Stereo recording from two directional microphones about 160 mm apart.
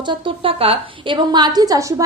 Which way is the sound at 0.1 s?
35° right (ahead or behind).